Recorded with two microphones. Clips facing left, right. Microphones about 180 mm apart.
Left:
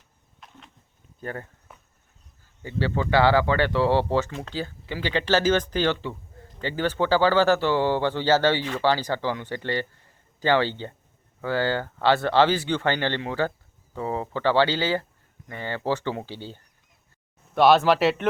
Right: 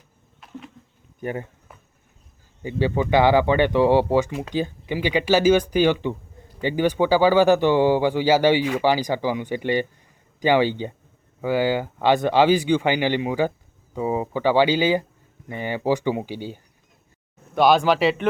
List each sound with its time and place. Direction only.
0.3 s insect: 5° right (ahead or behind)
1.2 s speech: 15° right (ahead or behind)
2.6 s speech: 15° right (ahead or behind)
17.5 s speech: centre (ahead or behind)